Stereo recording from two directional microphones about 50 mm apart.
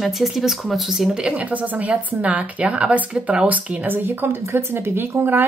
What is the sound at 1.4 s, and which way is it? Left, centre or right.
Speech, right.